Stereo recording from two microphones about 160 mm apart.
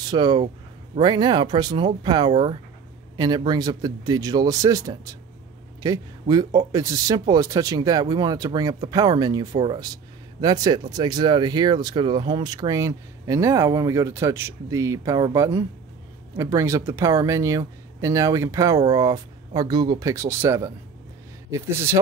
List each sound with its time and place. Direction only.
0.1 s speech: 25° right (ahead or behind)